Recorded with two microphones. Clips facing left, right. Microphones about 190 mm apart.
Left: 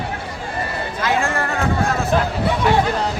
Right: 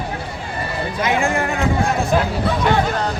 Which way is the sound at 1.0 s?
15° right (ahead or behind).